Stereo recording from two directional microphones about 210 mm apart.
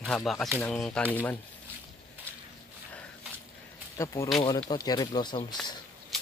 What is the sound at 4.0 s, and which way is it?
Speech, 15° left (ahead or behind).